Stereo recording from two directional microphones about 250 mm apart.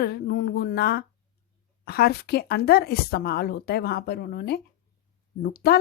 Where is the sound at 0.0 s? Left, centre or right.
Left.